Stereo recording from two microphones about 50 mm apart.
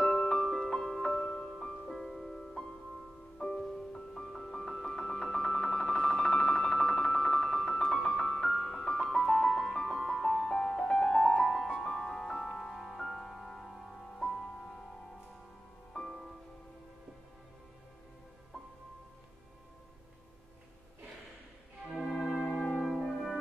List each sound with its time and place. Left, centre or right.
0.0 s music: centre
1.9 s music: centre
15.9 s music: centre
22.1 s brass instrument: centre
22.8 s music: centre